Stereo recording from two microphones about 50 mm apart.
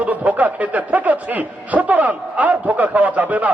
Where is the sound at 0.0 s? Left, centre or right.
Right.